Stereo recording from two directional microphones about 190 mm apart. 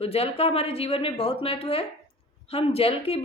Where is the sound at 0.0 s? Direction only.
30° left (ahead or behind).